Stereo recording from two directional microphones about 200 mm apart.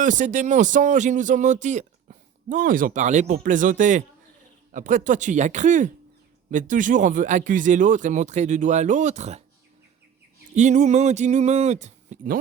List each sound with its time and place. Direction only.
0.0 s speech: 40° right (ahead or behind)
10.5 s speech: 35° right (ahead or behind)